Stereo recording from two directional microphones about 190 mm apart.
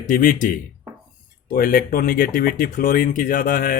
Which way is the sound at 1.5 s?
50° left (ahead or behind).